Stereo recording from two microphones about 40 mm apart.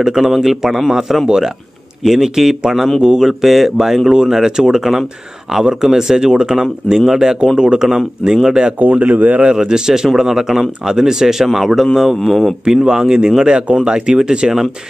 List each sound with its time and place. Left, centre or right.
0.0 s speech: centre
3.0 s speech: right
3.3 s speech: centre
7.5 s speech: right
8.4 s speech: centre
8.7 s speech: right
9.6 s speech: centre
12.2 s speech: centre
12.6 s speech: centre